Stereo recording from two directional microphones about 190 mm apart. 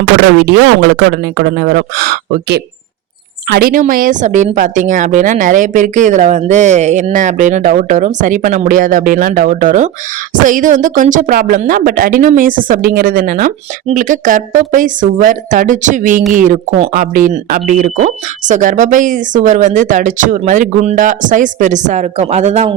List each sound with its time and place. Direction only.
0.4 s a woman's voice: 60° right (ahead or behind); by 22.7 s 35° right (ahead or behind)